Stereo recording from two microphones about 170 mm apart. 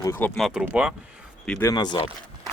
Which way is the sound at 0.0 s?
15° left (ahead or behind).